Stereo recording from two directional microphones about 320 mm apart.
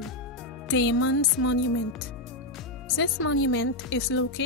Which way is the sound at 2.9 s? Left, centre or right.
Left.